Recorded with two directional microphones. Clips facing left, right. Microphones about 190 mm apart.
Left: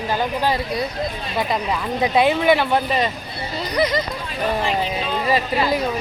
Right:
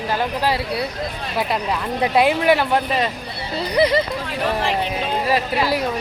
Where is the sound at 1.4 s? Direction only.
5° right (ahead or behind).